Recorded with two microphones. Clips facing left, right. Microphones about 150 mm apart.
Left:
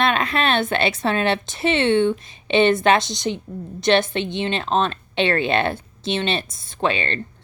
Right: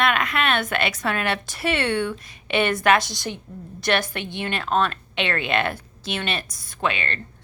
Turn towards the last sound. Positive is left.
turn(degrees=30)  # may be behind; listen again after turning